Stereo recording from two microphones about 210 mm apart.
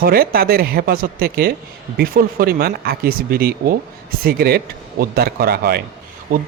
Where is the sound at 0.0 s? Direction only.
45° right (ahead or behind).